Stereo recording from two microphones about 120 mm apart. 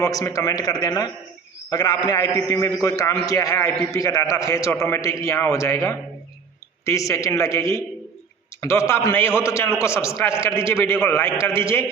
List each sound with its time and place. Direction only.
0.0 s a man's voice: 25° left (ahead or behind)